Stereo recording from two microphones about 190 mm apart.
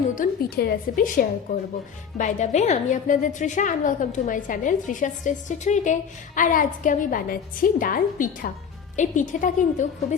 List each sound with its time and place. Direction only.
0.2 s a woman's voice: 55° left (ahead or behind)